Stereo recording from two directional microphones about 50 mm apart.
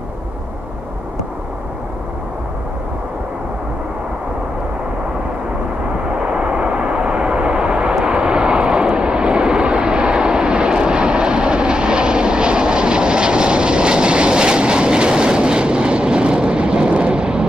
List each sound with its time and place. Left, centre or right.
6.1 s vehicle: centre